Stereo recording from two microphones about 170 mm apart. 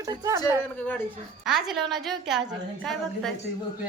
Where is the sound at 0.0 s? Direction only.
20° right (ahead or behind).